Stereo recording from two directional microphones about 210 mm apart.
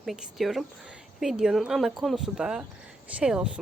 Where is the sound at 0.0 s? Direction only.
Centre (ahead or behind).